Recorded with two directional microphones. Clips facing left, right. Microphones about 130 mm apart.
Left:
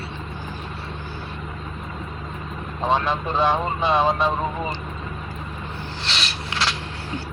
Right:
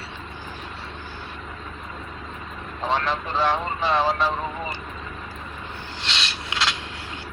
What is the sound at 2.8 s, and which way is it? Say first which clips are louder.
Speech: left 3 dB; 15° left (ahead or behind).